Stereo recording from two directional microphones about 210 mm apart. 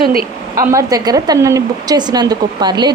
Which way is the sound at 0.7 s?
15° right (ahead or behind).